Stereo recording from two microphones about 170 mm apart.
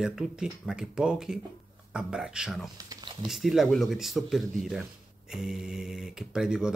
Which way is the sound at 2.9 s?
25° right (ahead or behind).